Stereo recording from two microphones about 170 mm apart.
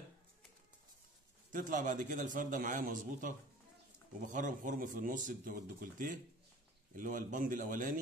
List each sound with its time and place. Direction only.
1.5 s speech: 50° right (ahead or behind)